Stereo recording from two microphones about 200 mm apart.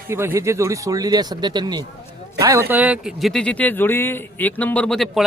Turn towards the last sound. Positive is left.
turn(degrees=0)  # may be behind; listen again after turning